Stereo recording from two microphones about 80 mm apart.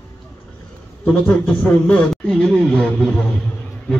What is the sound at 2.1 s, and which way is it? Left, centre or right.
A man's voice, centre.